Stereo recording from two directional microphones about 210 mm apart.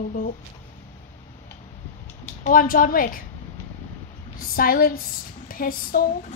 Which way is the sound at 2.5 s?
40° left (ahead or behind).